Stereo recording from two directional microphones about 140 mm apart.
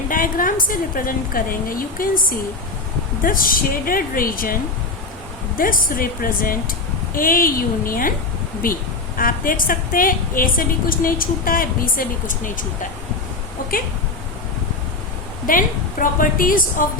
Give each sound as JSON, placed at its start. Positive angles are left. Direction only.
{"t": 0.1, "sound": "a woman's voice", "side_deg": 80}
{"t": 5.5, "sound": "a woman's voice", "side_deg": 90}
{"t": 15.4, "sound": "a woman's voice", "side_deg": 80}